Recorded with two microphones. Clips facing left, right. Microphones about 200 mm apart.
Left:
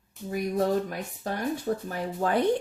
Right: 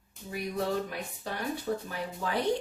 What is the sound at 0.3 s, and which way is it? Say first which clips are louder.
Speech: left 6 dB; 45° left (ahead or behind).